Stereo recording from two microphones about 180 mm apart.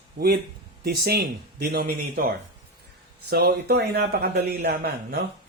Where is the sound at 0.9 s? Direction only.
60° right (ahead or behind).